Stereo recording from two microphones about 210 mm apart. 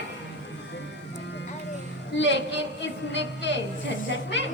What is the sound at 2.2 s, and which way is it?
A woman's voice, 55° left (ahead or behind).